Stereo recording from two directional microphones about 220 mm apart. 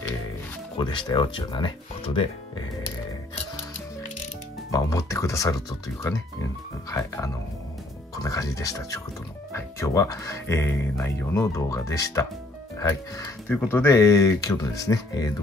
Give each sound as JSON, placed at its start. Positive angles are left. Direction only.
{"t": 0.7, "sound": "speech", "side_deg": 20}
{"t": 4.6, "sound": "speech", "side_deg": 15}